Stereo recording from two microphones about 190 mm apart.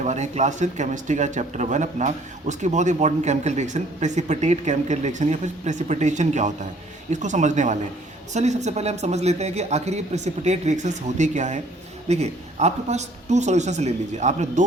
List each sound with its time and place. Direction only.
0.0 s speech: 35° right (ahead or behind)